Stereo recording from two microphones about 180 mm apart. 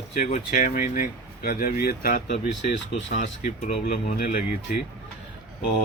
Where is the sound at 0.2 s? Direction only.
50° left (ahead or behind).